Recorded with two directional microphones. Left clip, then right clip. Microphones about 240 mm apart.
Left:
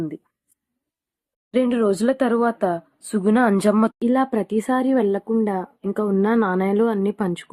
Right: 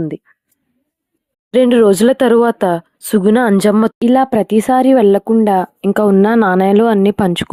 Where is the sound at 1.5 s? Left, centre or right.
Right.